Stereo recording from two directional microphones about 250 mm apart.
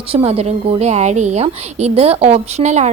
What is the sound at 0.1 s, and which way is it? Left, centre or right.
A woman's voice, right.